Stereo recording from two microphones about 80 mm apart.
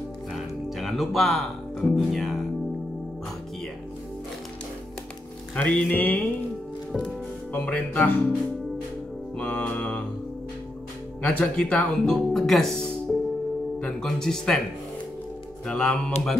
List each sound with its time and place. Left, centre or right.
0.3 s music: centre
5.6 s speech: centre
5.9 s speech: left
7.5 s speech: centre
9.4 s speech: centre
11.2 s speech: centre
15.6 s speech: centre